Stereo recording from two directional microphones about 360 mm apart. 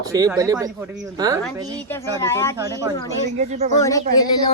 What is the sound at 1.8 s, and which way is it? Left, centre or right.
Speech, centre.